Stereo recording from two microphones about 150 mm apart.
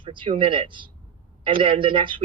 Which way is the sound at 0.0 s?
35° right (ahead or behind).